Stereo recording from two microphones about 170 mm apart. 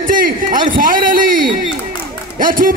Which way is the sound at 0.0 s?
55° right (ahead or behind).